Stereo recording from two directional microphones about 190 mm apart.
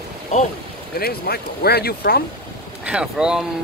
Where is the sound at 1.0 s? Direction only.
55° left (ahead or behind).